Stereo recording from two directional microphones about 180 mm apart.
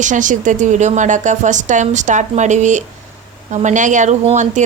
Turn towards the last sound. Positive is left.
turn(degrees=-40)  # may be behind; listen again after turning